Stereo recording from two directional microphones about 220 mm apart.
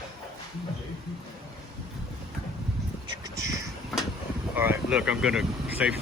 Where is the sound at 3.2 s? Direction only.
15° right (ahead or behind).